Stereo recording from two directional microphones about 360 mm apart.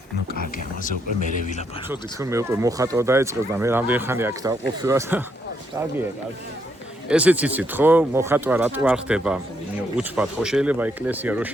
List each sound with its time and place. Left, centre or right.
0.9 s speech: left
1.9 s speech: centre
7.1 s speech: centre